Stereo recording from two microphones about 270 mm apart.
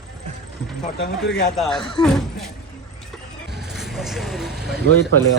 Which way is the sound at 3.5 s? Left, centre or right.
Centre.